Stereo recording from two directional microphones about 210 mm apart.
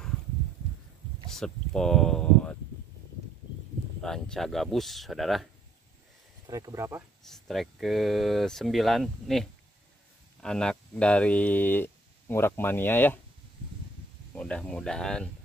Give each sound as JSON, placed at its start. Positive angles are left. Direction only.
{"t": 1.3, "sound": "speech", "side_deg": 0}
{"t": 4.0, "sound": "speech", "side_deg": 5}
{"t": 6.4, "sound": "speech", "side_deg": -15}
{"t": 7.2, "sound": "speech", "side_deg": 0}
{"t": 14.3, "sound": "speech", "side_deg": 5}